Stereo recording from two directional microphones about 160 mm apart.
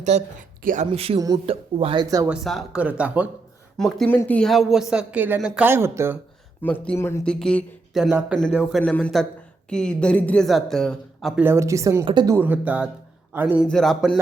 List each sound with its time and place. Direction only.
0.1 s speech: 45° right (ahead or behind)
0.6 s speech: 55° right (ahead or behind)
0.9 s speech: 35° right (ahead or behind)
2.2 s a man's voice: 5° right (ahead or behind)
3.8 s a man's voice: 5° left (ahead or behind); by 6.1 s 15° right (ahead or behind)
6.6 s speech: 10° left (ahead or behind)
7.3 s a man's voice: 5° left (ahead or behind)
11.4 s speech: 15° right (ahead or behind)
12.0 s speech: 30° right (ahead or behind)
12.3 s speech: 10° right (ahead or behind)
13.7 s a man's voice: centre (ahead or behind)